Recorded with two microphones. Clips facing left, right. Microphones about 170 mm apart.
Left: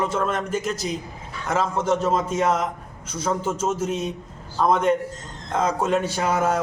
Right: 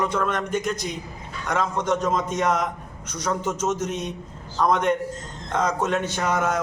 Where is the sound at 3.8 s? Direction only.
5° left (ahead or behind).